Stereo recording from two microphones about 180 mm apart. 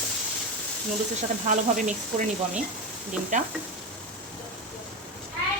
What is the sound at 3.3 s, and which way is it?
Speech, 40° right (ahead or behind).